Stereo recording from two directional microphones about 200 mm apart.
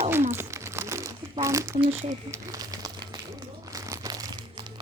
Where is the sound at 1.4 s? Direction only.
15° right (ahead or behind).